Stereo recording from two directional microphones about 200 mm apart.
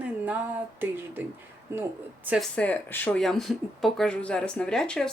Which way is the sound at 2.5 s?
5° left (ahead or behind).